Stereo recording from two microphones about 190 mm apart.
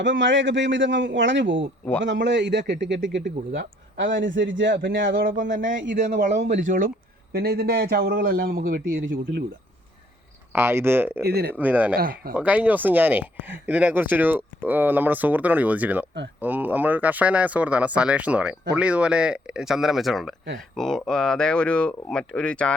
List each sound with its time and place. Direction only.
0.0 s a man's voice: 75° right (ahead or behind)
6.1 s speech: 40° right (ahead or behind)
7.3 s a man's voice: 55° right (ahead or behind)
10.5 s speech: 10° right (ahead or behind)
11.2 s speech: 55° right (ahead or behind)
11.5 s speech: 10° right (ahead or behind)
11.9 s a man's voice: 50° right (ahead or behind)
12.3 s speech: 10° right (ahead or behind)